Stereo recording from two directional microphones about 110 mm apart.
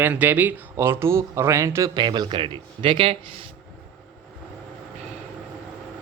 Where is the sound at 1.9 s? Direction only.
40° right (ahead or behind).